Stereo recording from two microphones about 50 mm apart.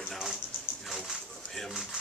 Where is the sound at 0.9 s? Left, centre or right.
Centre.